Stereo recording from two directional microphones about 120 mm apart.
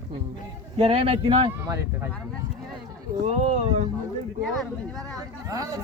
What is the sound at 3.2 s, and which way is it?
Speech, 60° right (ahead or behind).